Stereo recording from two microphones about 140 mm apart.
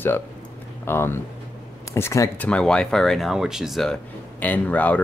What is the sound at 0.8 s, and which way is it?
Speech, 15° left (ahead or behind).